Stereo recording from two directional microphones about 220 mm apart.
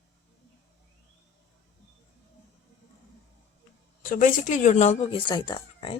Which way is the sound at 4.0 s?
35° left (ahead or behind).